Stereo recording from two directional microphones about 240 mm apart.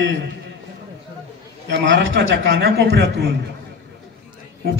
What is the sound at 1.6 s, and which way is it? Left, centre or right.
A man's voice, right.